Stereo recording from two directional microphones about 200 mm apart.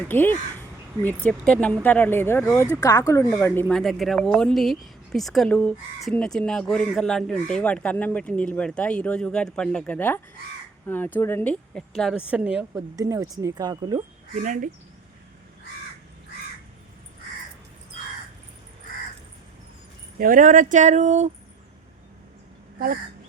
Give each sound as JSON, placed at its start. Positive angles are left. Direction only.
{"t": 0.1, "sound": "speech", "side_deg": 10}
{"t": 14.3, "sound": "speech", "side_deg": -40}
{"t": 20.1, "sound": "speech", "side_deg": -45}